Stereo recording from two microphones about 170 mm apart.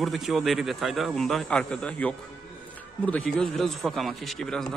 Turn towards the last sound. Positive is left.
turn(degrees=5)  # may be behind; listen again after turning